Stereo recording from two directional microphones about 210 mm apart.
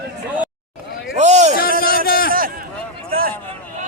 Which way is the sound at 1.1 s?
35° right (ahead or behind).